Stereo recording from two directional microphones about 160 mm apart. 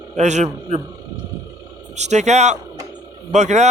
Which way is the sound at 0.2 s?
45° right (ahead or behind).